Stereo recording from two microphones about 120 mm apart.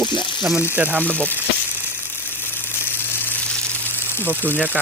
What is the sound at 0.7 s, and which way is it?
Speech, 15° right (ahead or behind).